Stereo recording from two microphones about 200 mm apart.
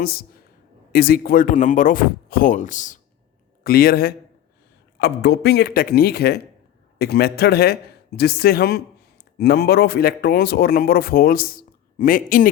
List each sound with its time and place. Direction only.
0.0 s a man's voice: 50° left (ahead or behind)